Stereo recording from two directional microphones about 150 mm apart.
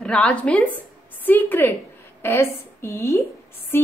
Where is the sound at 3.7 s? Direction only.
15° left (ahead or behind).